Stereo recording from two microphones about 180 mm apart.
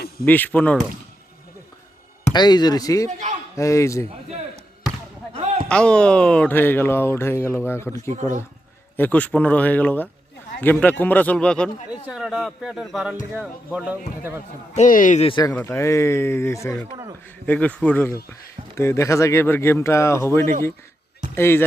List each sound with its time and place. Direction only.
0.3 s speech: 10° left (ahead or behind)
2.3 s speech: 25° left (ahead or behind)
5.6 s a man's voice: 5° left (ahead or behind)
14.7 s speech: 45° left (ahead or behind)
15.3 s speech: 25° left (ahead or behind)